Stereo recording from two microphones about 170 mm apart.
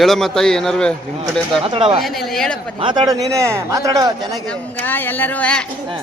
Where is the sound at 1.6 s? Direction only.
30° right (ahead or behind).